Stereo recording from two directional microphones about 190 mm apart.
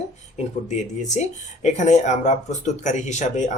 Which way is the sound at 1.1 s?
40° left (ahead or behind).